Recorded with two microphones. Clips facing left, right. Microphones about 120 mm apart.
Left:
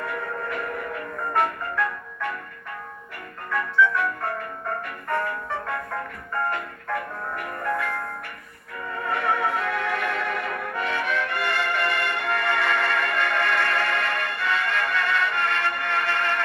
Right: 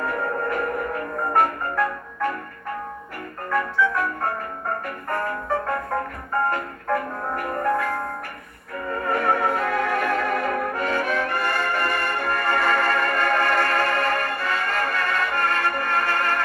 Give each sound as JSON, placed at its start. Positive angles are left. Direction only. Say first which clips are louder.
{"t": 0.0, "sound": "music", "louder": "right 5 dB", "side_deg": -40}
{"t": 3.5, "sound": "music", "louder": "even", "side_deg": -40}
{"t": 9.0, "sound": "brass instrument", "louder": "right 3 dB", "side_deg": -45}